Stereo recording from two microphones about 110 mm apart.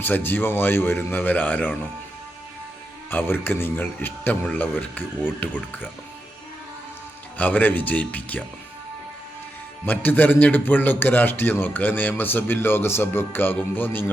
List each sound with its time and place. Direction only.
0.0 s a man's voice: 20° left (ahead or behind)
3.1 s a man's voice: 20° left (ahead or behind)
7.3 s a man's voice: 15° left (ahead or behind)
9.8 s a man's voice: 15° left (ahead or behind)